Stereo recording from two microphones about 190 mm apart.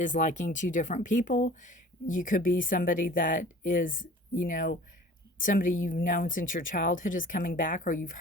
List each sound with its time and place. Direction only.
0.0 s speech: 40° left (ahead or behind)